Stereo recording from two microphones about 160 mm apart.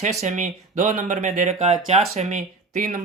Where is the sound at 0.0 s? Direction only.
50° right (ahead or behind).